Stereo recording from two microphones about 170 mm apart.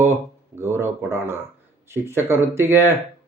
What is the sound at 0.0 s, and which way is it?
Speech, 15° right (ahead or behind).